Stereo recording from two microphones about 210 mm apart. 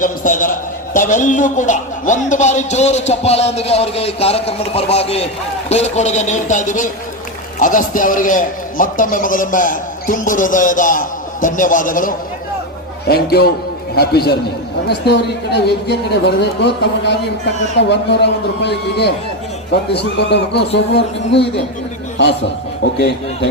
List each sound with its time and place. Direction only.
0.0 s a man's voice: 40° left (ahead or behind); by 21.4 s 55° left (ahead or behind)
22.8 s a man's voice: 50° left (ahead or behind)